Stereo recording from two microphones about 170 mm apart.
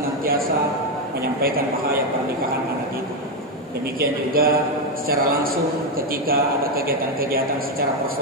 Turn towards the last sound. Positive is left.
turn(degrees=-60)  # may be behind; listen again after turning